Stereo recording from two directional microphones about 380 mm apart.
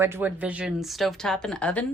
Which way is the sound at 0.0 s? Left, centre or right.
Centre.